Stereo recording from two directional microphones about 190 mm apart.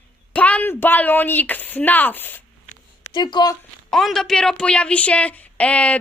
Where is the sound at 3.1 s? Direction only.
25° left (ahead or behind).